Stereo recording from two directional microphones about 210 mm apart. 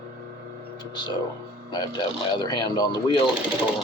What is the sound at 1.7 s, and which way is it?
Speech, 20° left (ahead or behind).